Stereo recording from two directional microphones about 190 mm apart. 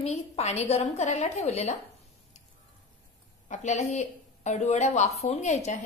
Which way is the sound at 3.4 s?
40° left (ahead or behind).